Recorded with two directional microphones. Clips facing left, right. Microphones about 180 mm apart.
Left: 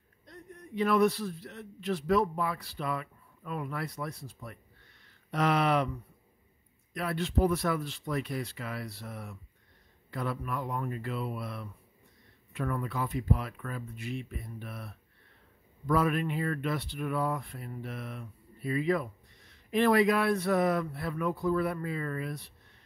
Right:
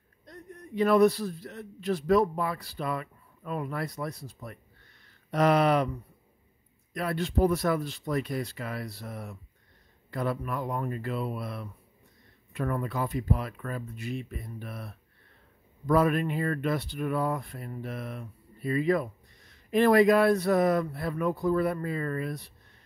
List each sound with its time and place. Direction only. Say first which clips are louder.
0.3 s a man's voice: right 2 dB; 40° right (ahead or behind)
6.9 s a man's voice: right 3 dB; 40° right (ahead or behind)
15.9 s a man's voice: right 4 dB; 40° right (ahead or behind)